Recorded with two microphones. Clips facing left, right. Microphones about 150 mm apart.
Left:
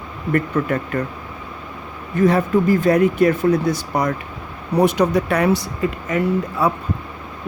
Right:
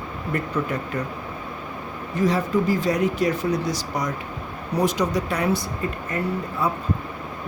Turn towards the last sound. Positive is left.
turn(degrees=85)